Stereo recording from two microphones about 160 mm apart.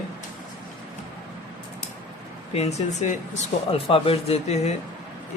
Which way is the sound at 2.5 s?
45° left (ahead or behind).